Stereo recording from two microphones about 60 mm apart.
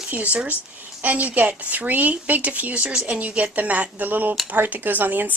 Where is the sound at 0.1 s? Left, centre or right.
Right.